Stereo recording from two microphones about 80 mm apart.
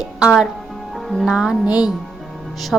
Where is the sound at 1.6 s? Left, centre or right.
Centre.